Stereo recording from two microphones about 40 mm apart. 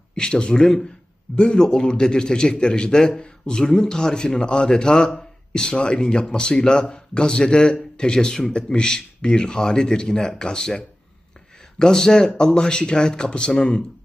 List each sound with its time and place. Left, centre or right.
0.2 s a man's voice: left
11.8 s a man's voice: centre